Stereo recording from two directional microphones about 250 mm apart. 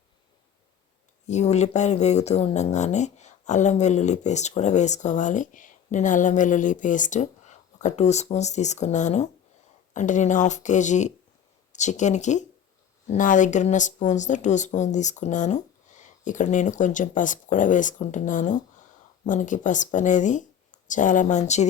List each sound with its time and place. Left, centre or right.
1.3 s speech: left